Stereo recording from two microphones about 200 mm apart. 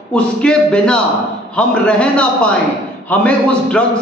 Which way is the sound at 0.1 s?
5° left (ahead or behind).